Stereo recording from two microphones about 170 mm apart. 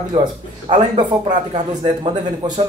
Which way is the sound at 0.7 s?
25° right (ahead or behind).